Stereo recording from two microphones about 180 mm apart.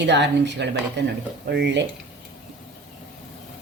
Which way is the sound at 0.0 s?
75° right (ahead or behind).